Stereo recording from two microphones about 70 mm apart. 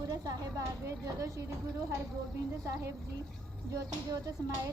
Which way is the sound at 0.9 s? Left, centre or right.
Right.